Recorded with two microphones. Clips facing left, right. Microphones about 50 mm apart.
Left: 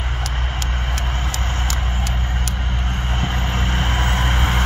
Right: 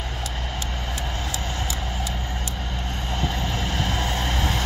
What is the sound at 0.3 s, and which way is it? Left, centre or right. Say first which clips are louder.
Vehicle: left 4 dB; left.